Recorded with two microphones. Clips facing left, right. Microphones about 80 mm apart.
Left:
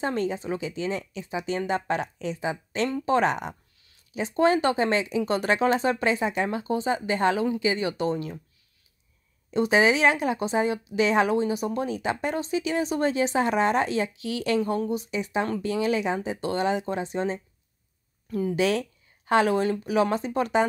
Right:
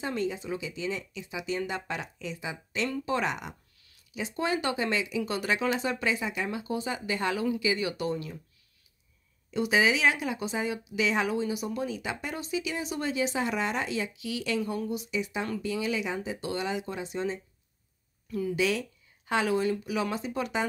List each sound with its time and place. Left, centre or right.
0.0 s speech: left
9.5 s a woman's voice: left